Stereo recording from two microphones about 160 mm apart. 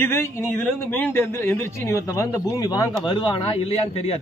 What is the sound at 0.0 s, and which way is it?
A man's voice, 15° left (ahead or behind).